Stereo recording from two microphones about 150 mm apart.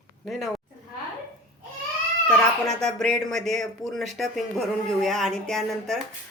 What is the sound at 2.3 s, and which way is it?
Speech, 5° left (ahead or behind).